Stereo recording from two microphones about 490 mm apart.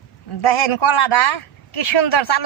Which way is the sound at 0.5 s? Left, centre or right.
Left.